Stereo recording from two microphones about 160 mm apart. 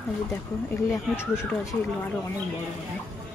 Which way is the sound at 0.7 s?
20° left (ahead or behind).